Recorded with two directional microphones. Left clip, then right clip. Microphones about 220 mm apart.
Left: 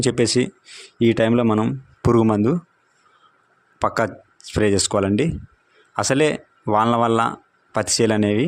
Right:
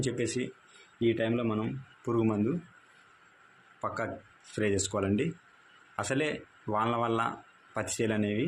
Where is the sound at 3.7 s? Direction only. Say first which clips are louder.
Left 14 dB; 50° left (ahead or behind).